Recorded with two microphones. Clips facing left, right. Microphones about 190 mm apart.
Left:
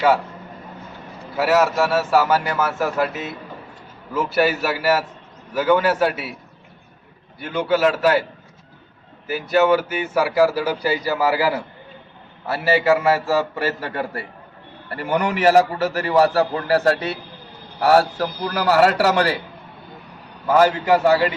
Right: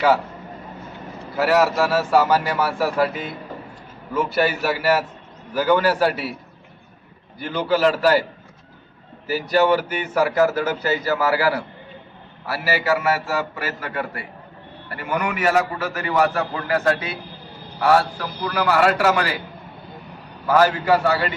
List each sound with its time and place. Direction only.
1.4 s a man's voice: centre (ahead or behind)
4.1 s a man's voice: 5° left (ahead or behind)
7.3 s a man's voice: 5° left (ahead or behind)
9.2 s speech: centre (ahead or behind); by 11.6 s 15° left (ahead or behind)
12.5 s a man's voice: 25° left (ahead or behind)
20.5 s speech: 20° left (ahead or behind)